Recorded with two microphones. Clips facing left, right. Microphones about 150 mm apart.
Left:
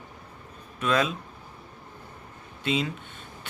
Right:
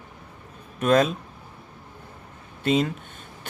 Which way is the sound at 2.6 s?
45° right (ahead or behind).